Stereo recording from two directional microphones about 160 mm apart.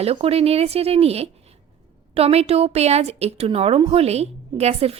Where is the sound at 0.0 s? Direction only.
40° right (ahead or behind).